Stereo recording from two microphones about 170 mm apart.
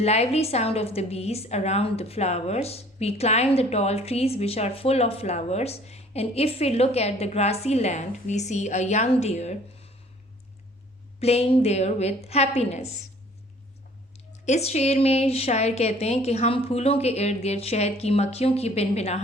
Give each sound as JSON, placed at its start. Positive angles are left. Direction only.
{"t": 0.0, "sound": "a woman's voice", "side_deg": 40}
{"t": 11.2, "sound": "a woman's voice", "side_deg": 35}
{"t": 14.4, "sound": "a woman's voice", "side_deg": 40}